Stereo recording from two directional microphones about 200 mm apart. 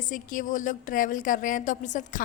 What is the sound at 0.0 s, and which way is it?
A woman's voice, 40° left (ahead or behind).